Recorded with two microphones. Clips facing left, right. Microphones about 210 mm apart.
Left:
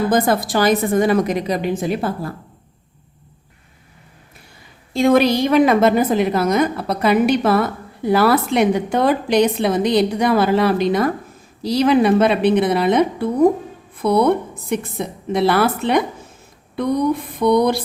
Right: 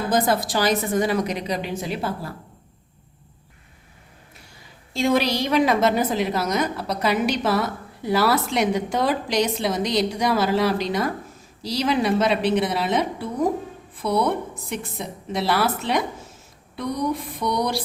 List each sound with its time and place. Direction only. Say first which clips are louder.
0.1 s a woman's voice: left 4 dB; 55° left (ahead or behind)
4.9 s a woman's voice: left 7 dB; 55° left (ahead or behind)